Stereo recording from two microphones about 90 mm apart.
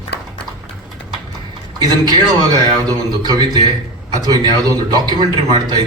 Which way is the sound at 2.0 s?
50° right (ahead or behind).